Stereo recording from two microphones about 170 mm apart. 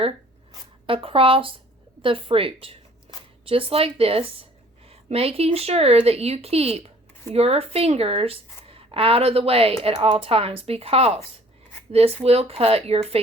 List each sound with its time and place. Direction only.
0.9 s a woman's voice: 30° right (ahead or behind)